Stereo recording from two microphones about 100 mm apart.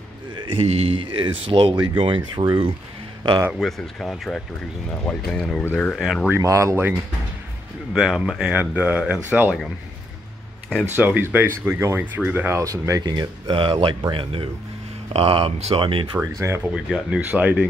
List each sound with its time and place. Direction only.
0.6 s speech: 90° right; by 2.6 s 50° right (ahead or behind)
3.5 s speech: 5° left (ahead or behind)
5.9 s speech: centre (ahead or behind)
6.3 s speech: 30° right (ahead or behind)
7.9 s speech: 5° right (ahead or behind)
8.5 s speech: 15° right (ahead or behind)
11.0 s speech: 20° right (ahead or behind)
12.5 s speech: 35° right (ahead or behind); by 16.2 s 55° right (ahead or behind)
16.3 s speech: 30° right (ahead or behind)
16.7 s speech: 5° right (ahead or behind)